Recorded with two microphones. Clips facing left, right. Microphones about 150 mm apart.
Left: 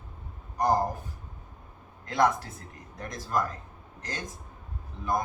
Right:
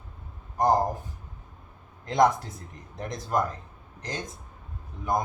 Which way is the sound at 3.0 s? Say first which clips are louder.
Right 2 dB; 25° right (ahead or behind).